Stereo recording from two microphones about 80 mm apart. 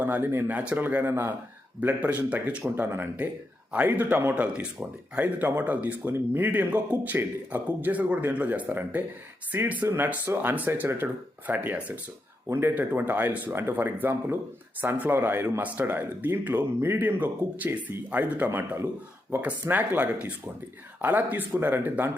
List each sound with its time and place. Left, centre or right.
0.0 s a man's voice: right
2.6 s a man's voice: right